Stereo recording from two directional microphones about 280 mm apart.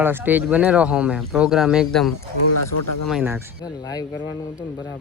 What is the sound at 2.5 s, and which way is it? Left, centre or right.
Speech, left.